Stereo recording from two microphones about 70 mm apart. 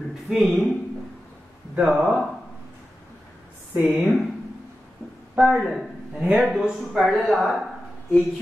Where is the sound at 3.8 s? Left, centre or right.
Centre.